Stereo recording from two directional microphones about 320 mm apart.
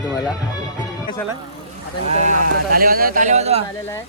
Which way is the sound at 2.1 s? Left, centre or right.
Right.